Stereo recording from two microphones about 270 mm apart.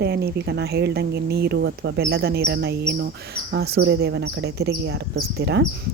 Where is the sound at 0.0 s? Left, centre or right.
Right.